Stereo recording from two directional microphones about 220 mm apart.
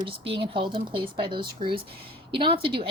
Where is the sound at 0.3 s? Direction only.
25° right (ahead or behind).